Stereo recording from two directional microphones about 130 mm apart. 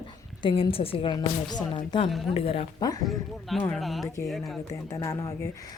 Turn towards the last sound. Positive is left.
turn(degrees=25)  # may be behind; listen again after turning